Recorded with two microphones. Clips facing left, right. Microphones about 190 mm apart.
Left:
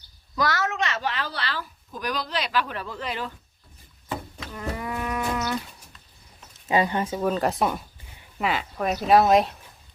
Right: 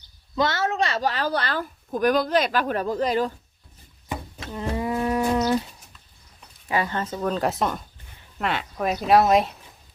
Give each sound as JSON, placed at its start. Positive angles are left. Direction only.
{"t": 0.3, "sound": "speech", "side_deg": -25}
{"t": 4.4, "sound": "a sound", "side_deg": -25}
{"t": 6.7, "sound": "speech", "side_deg": 20}